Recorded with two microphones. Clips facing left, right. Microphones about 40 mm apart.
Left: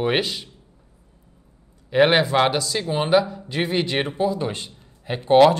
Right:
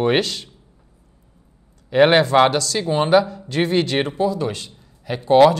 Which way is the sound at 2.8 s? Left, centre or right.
Centre.